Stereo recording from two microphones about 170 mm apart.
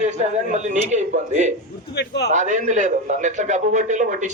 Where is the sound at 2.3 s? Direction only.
45° right (ahead or behind).